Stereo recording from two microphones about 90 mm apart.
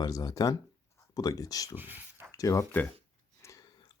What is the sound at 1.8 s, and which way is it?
Speech, 20° right (ahead or behind).